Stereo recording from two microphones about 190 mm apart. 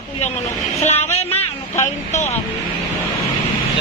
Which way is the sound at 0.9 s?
35° left (ahead or behind).